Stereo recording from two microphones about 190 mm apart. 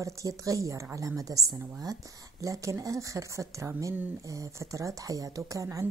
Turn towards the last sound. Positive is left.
turn(degrees=-15)  # may be behind; listen again after turning